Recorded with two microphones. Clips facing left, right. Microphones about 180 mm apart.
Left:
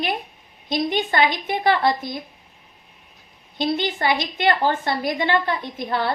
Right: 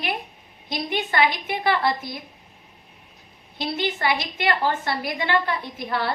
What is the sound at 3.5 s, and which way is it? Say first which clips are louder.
A woman's voice: left 4 dB; 25° left (ahead or behind).